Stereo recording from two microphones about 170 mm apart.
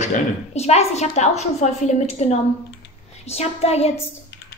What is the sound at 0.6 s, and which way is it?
A woman's voice, 40° left (ahead or behind).